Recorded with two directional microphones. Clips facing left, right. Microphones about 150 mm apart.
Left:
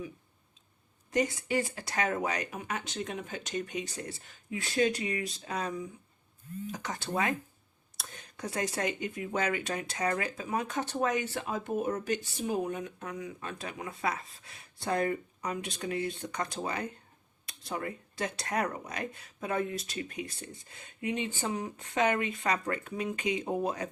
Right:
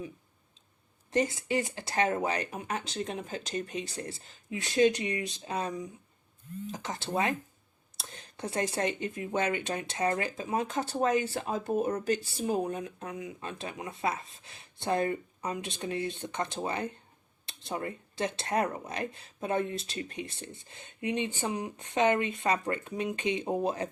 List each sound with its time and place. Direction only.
1.1 s speech: 25° right (ahead or behind)